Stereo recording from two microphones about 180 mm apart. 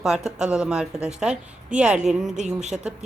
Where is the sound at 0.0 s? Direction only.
Centre (ahead or behind).